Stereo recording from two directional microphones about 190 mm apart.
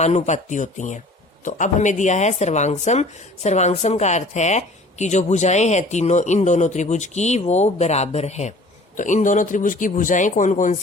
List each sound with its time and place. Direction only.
0.0 s speech: 40° left (ahead or behind)